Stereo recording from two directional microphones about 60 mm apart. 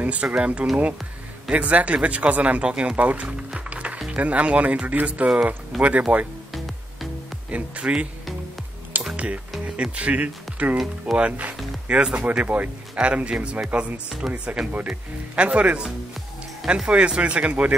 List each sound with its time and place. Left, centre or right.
0.0 s speech: right
6.5 s music: centre
7.5 s speech: right
9.1 s speech: right